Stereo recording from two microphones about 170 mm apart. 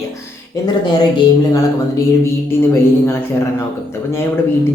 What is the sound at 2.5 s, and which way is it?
Speech, 15° left (ahead or behind).